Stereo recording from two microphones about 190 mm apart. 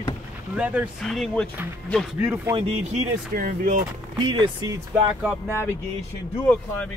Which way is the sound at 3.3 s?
50° right (ahead or behind).